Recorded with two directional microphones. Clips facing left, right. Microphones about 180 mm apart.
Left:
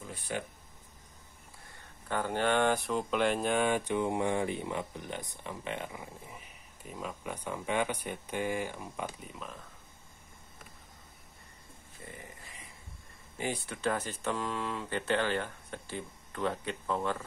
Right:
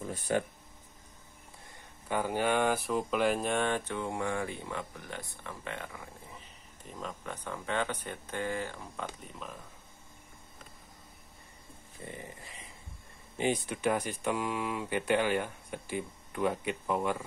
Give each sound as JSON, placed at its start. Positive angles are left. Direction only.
{"t": 0.3, "sound": "speech", "side_deg": -45}
{"t": 2.0, "sound": "speech", "side_deg": -10}
{"t": 6.9, "sound": "speech", "side_deg": 5}
{"t": 9.3, "sound": "speech", "side_deg": 0}
{"t": 12.0, "sound": "a sound", "side_deg": -20}
{"t": 13.4, "sound": "speech", "side_deg": -20}